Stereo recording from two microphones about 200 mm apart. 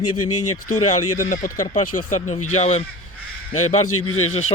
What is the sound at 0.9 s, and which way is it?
Speech, 40° left (ahead or behind).